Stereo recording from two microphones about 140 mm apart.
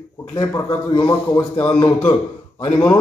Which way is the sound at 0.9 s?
35° left (ahead or behind).